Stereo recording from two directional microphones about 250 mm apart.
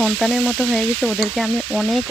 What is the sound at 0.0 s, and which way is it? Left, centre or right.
Frying, centre.